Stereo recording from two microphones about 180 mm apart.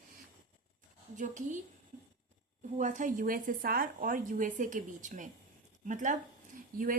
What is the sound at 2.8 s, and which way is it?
A woman's voice, 45° right (ahead or behind).